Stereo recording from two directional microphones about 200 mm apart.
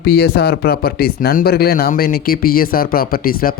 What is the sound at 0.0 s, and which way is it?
Speech, 50° left (ahead or behind).